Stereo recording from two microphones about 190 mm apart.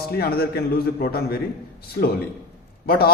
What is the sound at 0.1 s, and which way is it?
A man's voice, 55° left (ahead or behind).